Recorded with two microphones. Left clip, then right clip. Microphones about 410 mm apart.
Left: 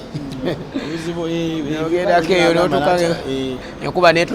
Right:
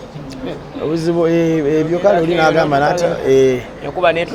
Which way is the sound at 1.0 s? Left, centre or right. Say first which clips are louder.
Right 9 dB; right.